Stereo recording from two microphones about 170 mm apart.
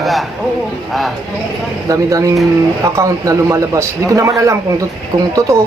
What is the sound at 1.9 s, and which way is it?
A man's voice, 20° right (ahead or behind).